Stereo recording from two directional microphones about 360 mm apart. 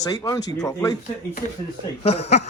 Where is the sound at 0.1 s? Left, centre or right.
Centre.